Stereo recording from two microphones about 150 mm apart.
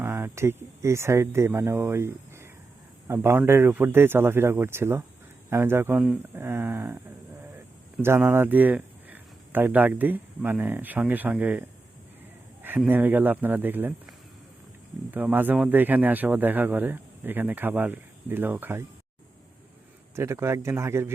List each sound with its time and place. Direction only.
0.0 s speech: 15° right (ahead or behind)
8.0 s speech: 15° right (ahead or behind)
12.6 s speech: 10° right (ahead or behind)
20.1 s speech: 15° right (ahead or behind)